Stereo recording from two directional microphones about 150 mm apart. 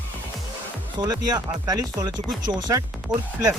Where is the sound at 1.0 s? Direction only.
25° right (ahead or behind).